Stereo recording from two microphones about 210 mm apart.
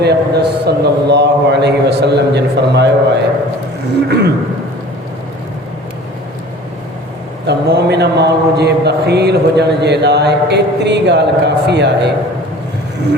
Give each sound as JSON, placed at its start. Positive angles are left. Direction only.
{"t": 0.0, "sound": "a man's voice", "side_deg": -50}
{"t": 7.4, "sound": "speech", "side_deg": -50}